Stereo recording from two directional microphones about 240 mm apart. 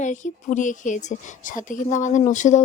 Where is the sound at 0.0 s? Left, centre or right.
Left.